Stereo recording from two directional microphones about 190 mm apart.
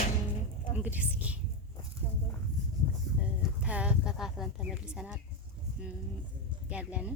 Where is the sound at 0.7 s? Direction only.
10° right (ahead or behind).